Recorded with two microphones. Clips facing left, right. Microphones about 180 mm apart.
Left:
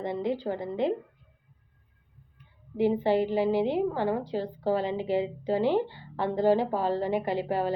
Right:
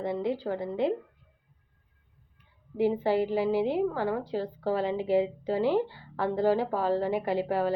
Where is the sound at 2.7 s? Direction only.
5° right (ahead or behind).